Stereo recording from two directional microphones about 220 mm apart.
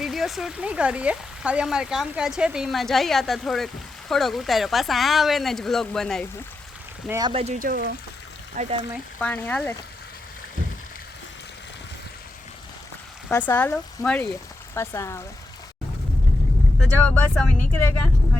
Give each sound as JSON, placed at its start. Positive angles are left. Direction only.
{"t": 0.0, "sound": "speech", "side_deg": 0}
{"t": 7.1, "sound": "speech", "side_deg": -20}
{"t": 8.6, "sound": "speech", "side_deg": -35}
{"t": 9.1, "sound": "speech", "side_deg": 10}
{"t": 13.3, "sound": "speech", "side_deg": 10}
{"t": 16.8, "sound": "speech", "side_deg": 5}